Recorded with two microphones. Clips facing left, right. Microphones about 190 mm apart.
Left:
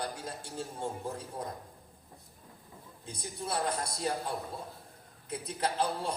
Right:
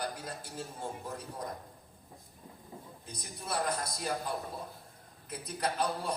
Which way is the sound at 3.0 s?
30° left (ahead or behind).